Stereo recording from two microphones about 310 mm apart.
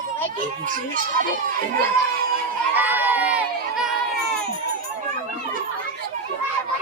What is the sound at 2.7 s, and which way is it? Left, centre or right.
Crowd, centre.